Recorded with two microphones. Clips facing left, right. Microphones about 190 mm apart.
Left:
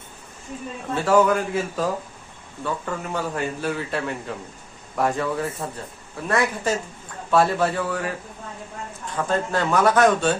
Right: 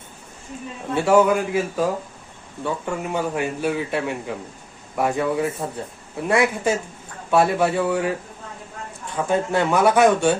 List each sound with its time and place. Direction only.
0.9 s a man's voice: 10° right (ahead or behind)
9.1 s a man's voice: 10° right (ahead or behind)